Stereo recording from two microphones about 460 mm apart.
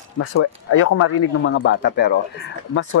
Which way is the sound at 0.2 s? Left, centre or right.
Left.